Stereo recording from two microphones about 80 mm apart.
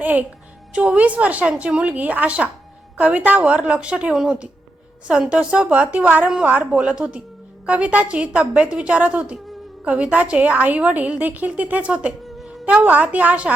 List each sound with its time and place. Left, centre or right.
0.0 s a woman's voice: right